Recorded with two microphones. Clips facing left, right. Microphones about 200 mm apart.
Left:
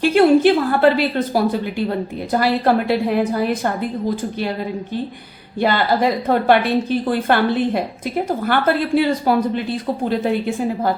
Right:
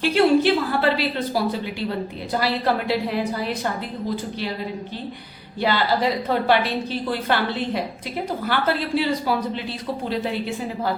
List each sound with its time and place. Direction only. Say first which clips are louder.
0.0 s a woman's voice: left 5 dB; 50° left (ahead or behind)
5.5 s a woman's voice: left 4 dB; 50° left (ahead or behind)